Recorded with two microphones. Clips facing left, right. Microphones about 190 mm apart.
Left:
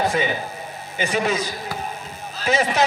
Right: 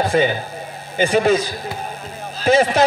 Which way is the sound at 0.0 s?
30° right (ahead or behind).